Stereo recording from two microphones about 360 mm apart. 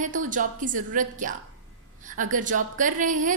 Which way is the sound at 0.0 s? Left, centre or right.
Right.